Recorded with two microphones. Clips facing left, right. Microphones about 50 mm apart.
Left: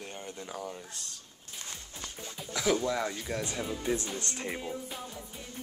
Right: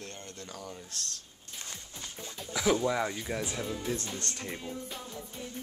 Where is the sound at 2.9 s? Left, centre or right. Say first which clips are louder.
Right 1 dB; centre.